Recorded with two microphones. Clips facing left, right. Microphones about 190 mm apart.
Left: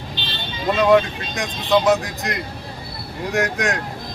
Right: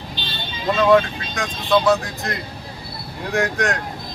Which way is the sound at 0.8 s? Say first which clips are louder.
Even; 15° left (ahead or behind).